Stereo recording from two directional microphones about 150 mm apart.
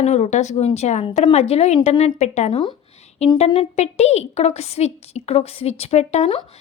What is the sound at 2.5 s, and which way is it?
Speech, 30° left (ahead or behind).